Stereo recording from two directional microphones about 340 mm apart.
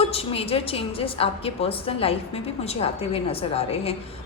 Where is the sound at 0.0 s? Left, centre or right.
Centre.